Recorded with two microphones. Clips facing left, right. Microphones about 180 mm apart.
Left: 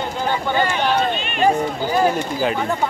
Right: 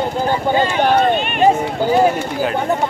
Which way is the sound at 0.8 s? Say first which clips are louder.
Right 5 dB; 50° right (ahead or behind).